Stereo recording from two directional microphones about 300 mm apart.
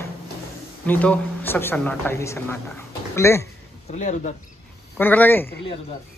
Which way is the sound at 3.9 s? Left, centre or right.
Left.